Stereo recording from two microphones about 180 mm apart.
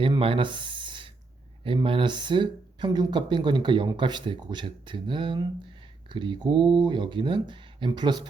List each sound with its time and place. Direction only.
0.0 s speech: 30° right (ahead or behind)